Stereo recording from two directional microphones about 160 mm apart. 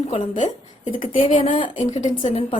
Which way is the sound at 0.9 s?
55° left (ahead or behind).